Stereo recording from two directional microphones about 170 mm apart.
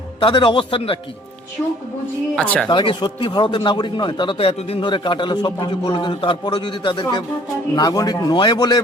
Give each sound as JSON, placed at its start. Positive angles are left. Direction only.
{"t": 0.2, "sound": "a man's voice", "side_deg": 30}
{"t": 2.3, "sound": "speech", "side_deg": 5}
{"t": 2.6, "sound": "a man's voice", "side_deg": 25}